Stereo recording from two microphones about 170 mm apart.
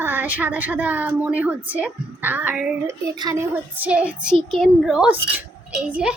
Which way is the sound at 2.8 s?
20° right (ahead or behind).